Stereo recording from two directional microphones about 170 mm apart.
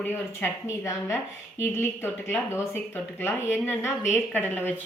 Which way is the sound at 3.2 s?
15° left (ahead or behind).